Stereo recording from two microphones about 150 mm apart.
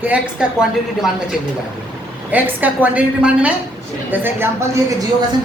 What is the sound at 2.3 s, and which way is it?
A woman's voice, 10° right (ahead or behind).